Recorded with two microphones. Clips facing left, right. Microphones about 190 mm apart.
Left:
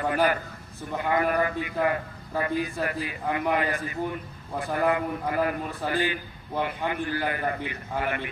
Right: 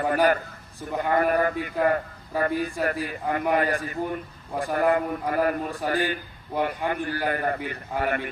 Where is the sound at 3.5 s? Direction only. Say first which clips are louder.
Right 3 dB; 50° right (ahead or behind).